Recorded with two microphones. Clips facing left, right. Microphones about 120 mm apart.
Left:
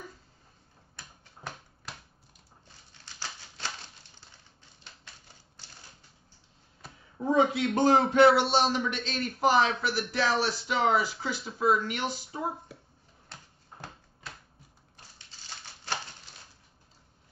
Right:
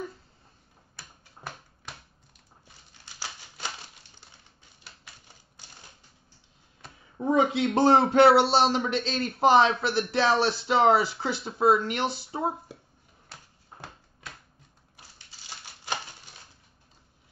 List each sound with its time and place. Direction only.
0.9 s typewriter: 5° right (ahead or behind)
3.2 s typewriter: 10° right (ahead or behind)
7.2 s a man's voice: 20° right (ahead or behind)
15.6 s a sound: 15° right (ahead or behind)